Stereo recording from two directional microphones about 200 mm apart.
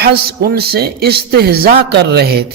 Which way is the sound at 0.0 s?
50° right (ahead or behind).